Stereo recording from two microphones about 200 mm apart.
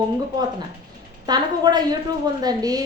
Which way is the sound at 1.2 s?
20° right (ahead or behind).